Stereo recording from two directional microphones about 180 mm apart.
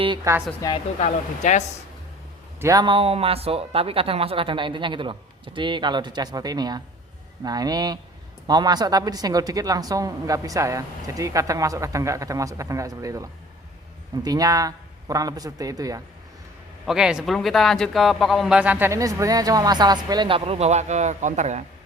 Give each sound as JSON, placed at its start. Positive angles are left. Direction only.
{"t": 0.3, "sound": "a woman's voice", "side_deg": -15}
{"t": 0.6, "sound": "a woman's voice", "side_deg": 20}
{"t": 0.9, "sound": "speech", "side_deg": 40}
{"t": 2.6, "sound": "a woman's voice", "side_deg": -20}
{"t": 16.8, "sound": "a woman's voice", "side_deg": -5}